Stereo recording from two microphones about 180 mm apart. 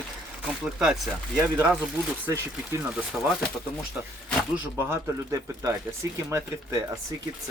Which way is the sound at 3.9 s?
10° right (ahead or behind).